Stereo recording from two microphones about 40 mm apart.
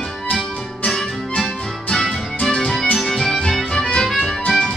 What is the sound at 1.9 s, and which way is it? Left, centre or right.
Music, centre.